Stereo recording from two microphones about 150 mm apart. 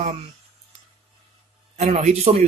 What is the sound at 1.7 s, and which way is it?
Speech, 45° right (ahead or behind).